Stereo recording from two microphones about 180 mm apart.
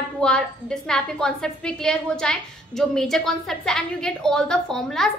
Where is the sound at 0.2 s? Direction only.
5° left (ahead or behind).